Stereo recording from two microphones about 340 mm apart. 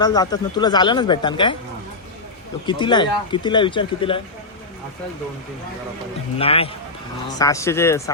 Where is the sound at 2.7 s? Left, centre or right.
Centre.